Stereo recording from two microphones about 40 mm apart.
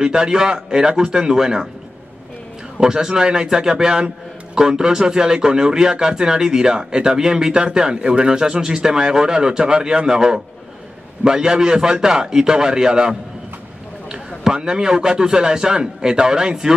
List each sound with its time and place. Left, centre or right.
0.0 s speech: centre
2.8 s speech: centre